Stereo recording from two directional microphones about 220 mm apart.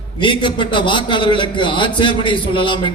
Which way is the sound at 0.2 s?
20° left (ahead or behind).